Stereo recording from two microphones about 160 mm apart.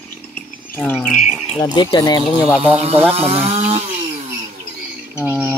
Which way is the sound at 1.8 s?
25° left (ahead or behind).